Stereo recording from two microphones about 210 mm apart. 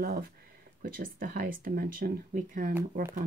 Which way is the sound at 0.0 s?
45° right (ahead or behind).